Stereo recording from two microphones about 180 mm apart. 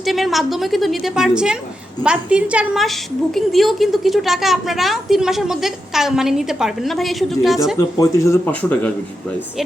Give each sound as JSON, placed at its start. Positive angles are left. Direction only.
{"t": 0.0, "sound": "a woman's voice", "side_deg": 0}
{"t": 7.8, "sound": "a man's voice", "side_deg": 20}